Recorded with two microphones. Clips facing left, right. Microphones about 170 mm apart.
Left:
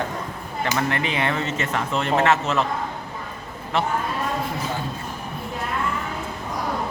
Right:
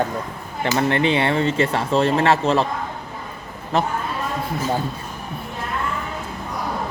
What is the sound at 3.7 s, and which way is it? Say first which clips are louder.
Speech: right 3 dB; 40° right (ahead or behind).